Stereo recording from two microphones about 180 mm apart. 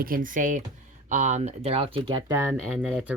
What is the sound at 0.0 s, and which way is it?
Speech, 50° right (ahead or behind).